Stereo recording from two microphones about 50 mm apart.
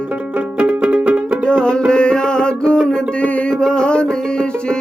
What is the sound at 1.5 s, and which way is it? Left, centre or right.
Music, centre.